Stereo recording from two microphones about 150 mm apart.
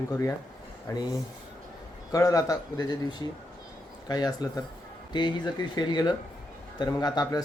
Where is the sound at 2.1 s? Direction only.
20° left (ahead or behind).